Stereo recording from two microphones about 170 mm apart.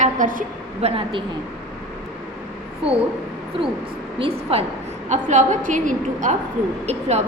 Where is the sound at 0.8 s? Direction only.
35° right (ahead or behind).